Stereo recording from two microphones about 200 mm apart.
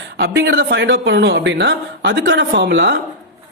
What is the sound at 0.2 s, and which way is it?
A woman's voice, 65° right (ahead or behind).